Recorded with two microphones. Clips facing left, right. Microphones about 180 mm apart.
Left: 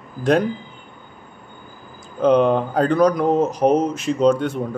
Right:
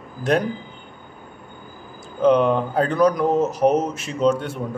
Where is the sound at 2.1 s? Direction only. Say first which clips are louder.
Left 1 dB; 35° left (ahead or behind).